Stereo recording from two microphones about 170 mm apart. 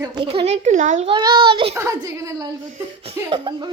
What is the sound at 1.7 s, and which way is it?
Speech, 15° right (ahead or behind).